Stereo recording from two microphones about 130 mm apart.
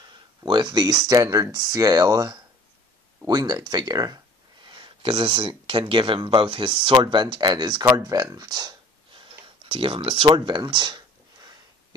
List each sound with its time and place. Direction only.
0.5 s speech: 35° right (ahead or behind)
9.4 s tick-tock: 45° right (ahead or behind)